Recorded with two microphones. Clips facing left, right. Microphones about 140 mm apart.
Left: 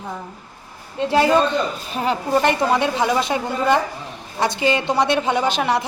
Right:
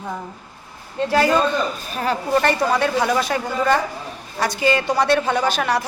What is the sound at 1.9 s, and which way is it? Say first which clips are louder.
A woman's voice: left 1 dB; 20° left (ahead or behind).